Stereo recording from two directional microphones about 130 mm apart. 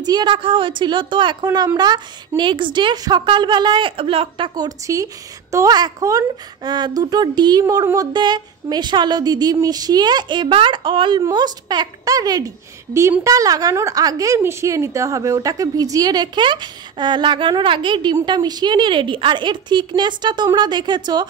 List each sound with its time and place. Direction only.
0.0 s a woman's voice: 35° right (ahead or behind)
4.6 s a woman's voice: 25° right (ahead or behind)